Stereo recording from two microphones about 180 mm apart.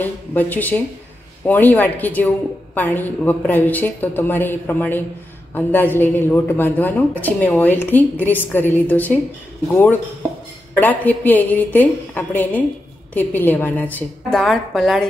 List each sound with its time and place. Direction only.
0.0 s a woman's voice: 10° left (ahead or behind)
10.8 s a woman's voice: 10° left (ahead or behind)